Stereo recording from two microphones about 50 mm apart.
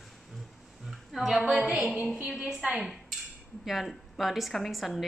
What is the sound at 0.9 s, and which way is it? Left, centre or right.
A woman's voice, centre.